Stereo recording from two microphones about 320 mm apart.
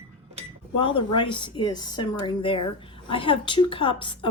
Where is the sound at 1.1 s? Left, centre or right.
Centre.